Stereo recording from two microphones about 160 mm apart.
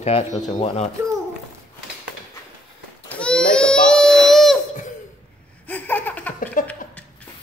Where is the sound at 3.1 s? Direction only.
5° left (ahead or behind).